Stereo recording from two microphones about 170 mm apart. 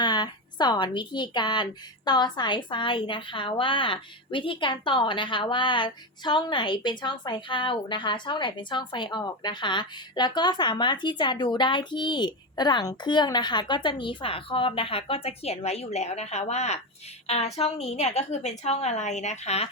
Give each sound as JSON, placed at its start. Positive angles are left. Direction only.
{"t": 0.0, "sound": "a woman's voice", "side_deg": 25}